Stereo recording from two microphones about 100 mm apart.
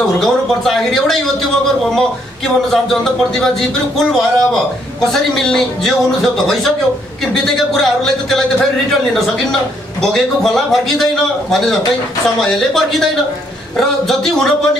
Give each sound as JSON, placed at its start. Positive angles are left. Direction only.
{"t": 0.2, "sound": "speech", "side_deg": 5}
{"t": 10.1, "sound": "speech", "side_deg": 5}
{"t": 12.4, "sound": "speech", "side_deg": 5}